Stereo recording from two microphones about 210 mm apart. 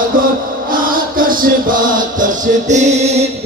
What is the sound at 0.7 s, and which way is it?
Music, 40° right (ahead or behind).